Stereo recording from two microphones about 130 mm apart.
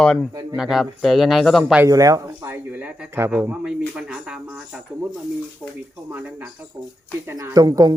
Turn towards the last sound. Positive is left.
turn(degrees=-30)  # may be behind; listen again after turning